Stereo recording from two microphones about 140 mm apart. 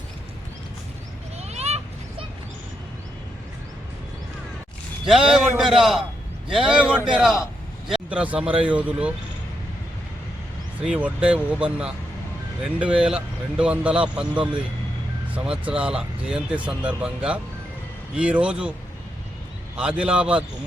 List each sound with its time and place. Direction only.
1.4 s children playing: 50° right (ahead or behind)
5.0 s a man's voice: 5° right (ahead or behind)
10.8 s speech: 10° right (ahead or behind)
19.7 s speech: 5° right (ahead or behind)